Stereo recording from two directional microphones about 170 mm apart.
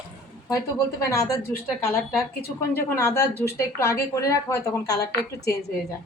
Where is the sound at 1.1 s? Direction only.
20° left (ahead or behind).